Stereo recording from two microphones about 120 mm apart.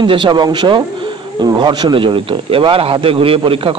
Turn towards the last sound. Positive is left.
turn(degrees=-50)  # may be behind; listen again after turning